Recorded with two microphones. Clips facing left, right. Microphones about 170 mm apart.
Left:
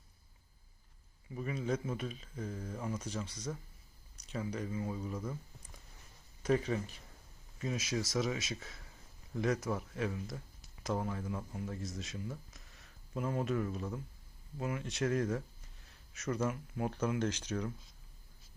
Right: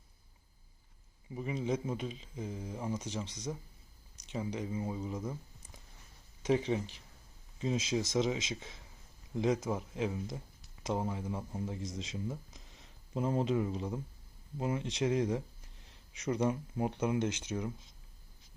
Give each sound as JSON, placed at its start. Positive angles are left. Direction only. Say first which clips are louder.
{"t": 1.4, "sound": "speech", "louder": "right 2 dB", "side_deg": -20}
{"t": 6.4, "sound": "speech", "louder": "right 1 dB", "side_deg": -20}
{"t": 11.8, "sound": "speech", "louder": "right 2 dB", "side_deg": -90}
{"t": 12.1, "sound": "speech", "louder": "right 4 dB", "side_deg": -20}